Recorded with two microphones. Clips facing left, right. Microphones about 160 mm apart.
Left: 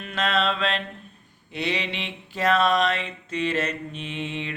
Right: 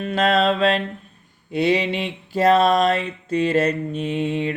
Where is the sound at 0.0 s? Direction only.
40° right (ahead or behind).